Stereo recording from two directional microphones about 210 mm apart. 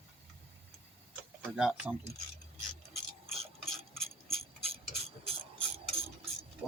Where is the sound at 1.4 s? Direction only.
5° right (ahead or behind).